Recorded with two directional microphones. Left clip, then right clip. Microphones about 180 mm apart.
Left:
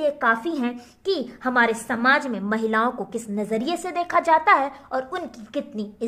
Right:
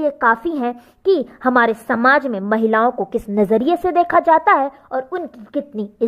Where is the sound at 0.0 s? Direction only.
50° right (ahead or behind).